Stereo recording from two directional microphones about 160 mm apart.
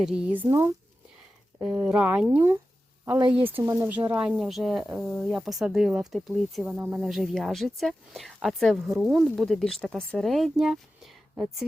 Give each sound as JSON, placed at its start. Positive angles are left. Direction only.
{"t": 0.0, "sound": "speech", "side_deg": -5}
{"t": 0.4, "sound": "speech", "side_deg": -20}
{"t": 1.6, "sound": "speech", "side_deg": -5}
{"t": 6.7, "sound": "speech", "side_deg": -10}